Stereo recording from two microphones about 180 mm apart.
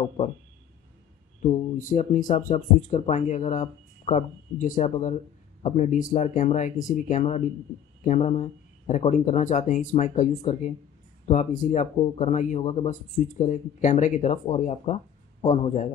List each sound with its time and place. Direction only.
1.4 s speech: 40° left (ahead or behind)